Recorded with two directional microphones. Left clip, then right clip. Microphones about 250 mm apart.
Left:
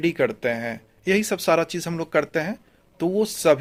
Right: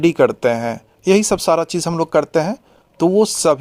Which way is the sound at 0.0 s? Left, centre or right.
Right.